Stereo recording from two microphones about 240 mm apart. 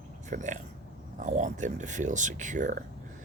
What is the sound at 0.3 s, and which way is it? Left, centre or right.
Speech, right.